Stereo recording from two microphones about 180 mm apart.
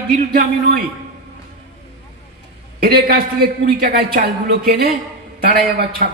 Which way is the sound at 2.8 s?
65° right (ahead or behind).